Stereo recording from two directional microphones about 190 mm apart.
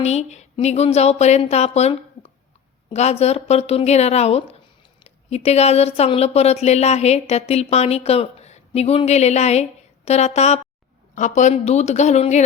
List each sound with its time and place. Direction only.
0.0 s speech: 35° left (ahead or behind)